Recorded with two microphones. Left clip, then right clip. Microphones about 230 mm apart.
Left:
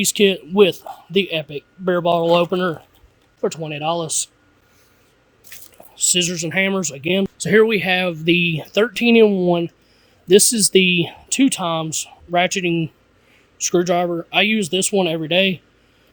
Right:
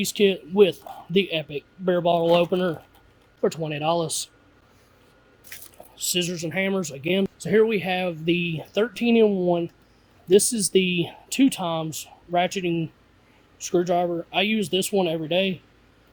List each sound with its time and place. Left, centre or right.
0.0 s speech: left
5.9 s speech: left
7.3 s speech: left